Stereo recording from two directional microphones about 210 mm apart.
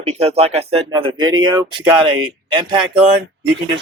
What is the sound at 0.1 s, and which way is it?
Speech, 30° right (ahead or behind).